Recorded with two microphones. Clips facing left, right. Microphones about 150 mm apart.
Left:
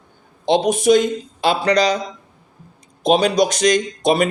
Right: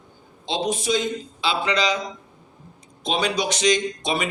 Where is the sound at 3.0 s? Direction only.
45° left (ahead or behind).